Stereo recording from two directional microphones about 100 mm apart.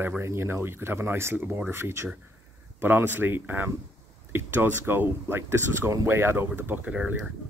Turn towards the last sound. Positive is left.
turn(degrees=-10)  # may be behind; listen again after turning